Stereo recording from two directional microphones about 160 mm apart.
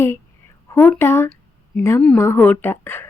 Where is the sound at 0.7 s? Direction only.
15° left (ahead or behind).